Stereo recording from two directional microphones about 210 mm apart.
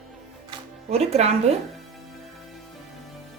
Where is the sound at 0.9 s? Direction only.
30° right (ahead or behind).